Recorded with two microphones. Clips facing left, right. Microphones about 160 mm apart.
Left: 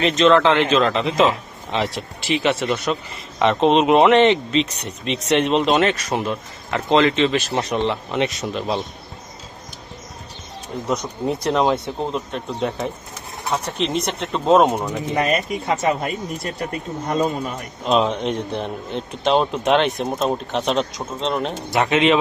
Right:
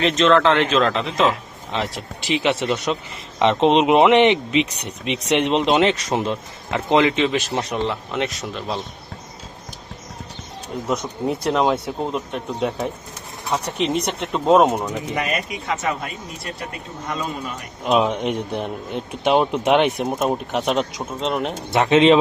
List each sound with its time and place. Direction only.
0.0 s speech: centre (ahead or behind)
2.2 s speech: 15° right (ahead or behind)
7.5 s speech: centre (ahead or behind)
10.8 s speech: 5° right (ahead or behind)
15.1 s speech: 35° left (ahead or behind)
17.1 s speech: 45° left (ahead or behind)
17.8 s speech: 10° right (ahead or behind)
21.8 s speech: 30° right (ahead or behind)